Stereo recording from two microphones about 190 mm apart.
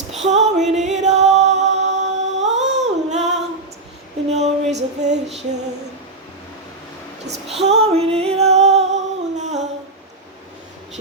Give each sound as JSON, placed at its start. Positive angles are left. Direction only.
{"t": 0.1, "sound": "female singing", "side_deg": -35}
{"t": 2.6, "sound": "a sound", "side_deg": -35}
{"t": 4.3, "sound": "music", "side_deg": -35}
{"t": 7.5, "sound": "music", "side_deg": -35}